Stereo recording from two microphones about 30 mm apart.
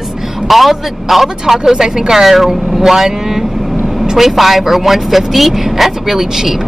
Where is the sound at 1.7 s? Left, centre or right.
Centre.